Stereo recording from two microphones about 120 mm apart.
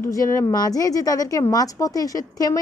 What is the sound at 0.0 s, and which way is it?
A woman's voice, 25° left (ahead or behind).